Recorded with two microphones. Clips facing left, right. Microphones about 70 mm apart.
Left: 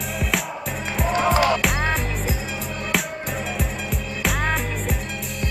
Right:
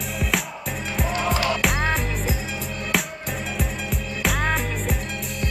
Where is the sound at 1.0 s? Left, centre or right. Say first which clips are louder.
Left 5 dB; centre.